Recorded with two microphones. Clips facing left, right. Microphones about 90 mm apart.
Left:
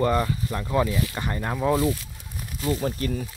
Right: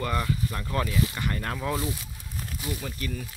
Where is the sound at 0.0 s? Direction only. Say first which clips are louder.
Left 6 dB; 25° left (ahead or behind).